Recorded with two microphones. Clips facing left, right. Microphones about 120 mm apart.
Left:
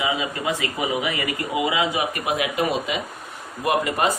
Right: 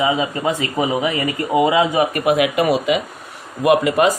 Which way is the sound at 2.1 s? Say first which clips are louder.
Right 8 dB; 65° right (ahead or behind).